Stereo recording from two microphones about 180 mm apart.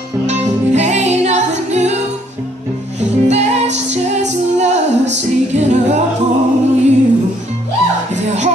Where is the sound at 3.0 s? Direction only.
40° right (ahead or behind).